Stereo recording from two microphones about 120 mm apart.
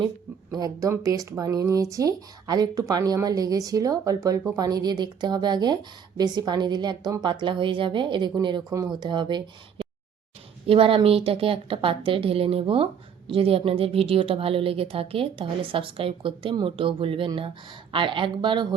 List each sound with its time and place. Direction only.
0.5 s a woman's voice: 30° right (ahead or behind)